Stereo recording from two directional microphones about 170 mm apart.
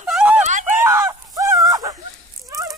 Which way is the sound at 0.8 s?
15° right (ahead or behind).